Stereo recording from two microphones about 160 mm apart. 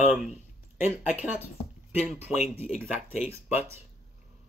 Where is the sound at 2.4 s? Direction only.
40° left (ahead or behind).